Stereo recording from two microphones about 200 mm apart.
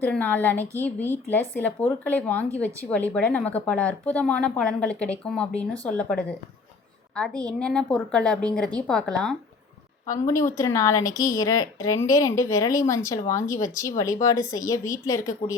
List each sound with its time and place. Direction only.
0.0 s a woman's voice: 10° left (ahead or behind)
7.4 s speech: 5° left (ahead or behind)
10.1 s a woman's voice: 15° left (ahead or behind)